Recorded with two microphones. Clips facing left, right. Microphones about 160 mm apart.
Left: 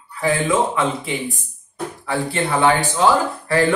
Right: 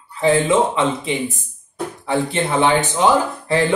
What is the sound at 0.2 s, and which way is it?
Speech, 25° right (ahead or behind).